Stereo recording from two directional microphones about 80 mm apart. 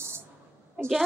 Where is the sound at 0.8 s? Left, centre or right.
Centre.